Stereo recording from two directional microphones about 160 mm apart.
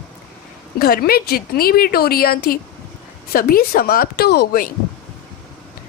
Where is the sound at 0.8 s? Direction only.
70° left (ahead or behind).